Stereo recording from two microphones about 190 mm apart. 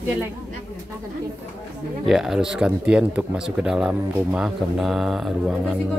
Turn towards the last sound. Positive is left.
turn(degrees=0)  # may be behind; listen again after turning